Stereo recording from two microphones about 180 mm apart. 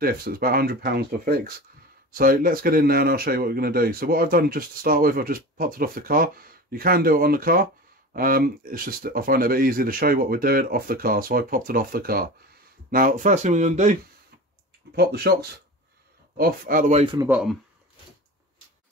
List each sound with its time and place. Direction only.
0.0 s speech: 55° right (ahead or behind)
12.9 s speech: 45° right (ahead or behind)
15.0 s speech: 60° right (ahead or behind)
16.3 s speech: 55° right (ahead or behind)
17.0 s speech: 30° right (ahead or behind)
17.3 s speech: 5° right (ahead or behind)